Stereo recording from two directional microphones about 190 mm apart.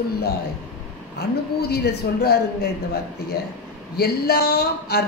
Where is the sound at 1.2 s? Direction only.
60° left (ahead or behind).